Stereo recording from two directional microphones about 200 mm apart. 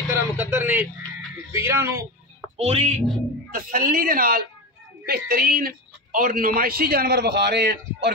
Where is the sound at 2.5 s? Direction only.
30° right (ahead or behind).